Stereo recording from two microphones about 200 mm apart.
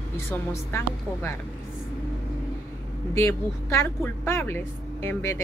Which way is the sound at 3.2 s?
10° left (ahead or behind).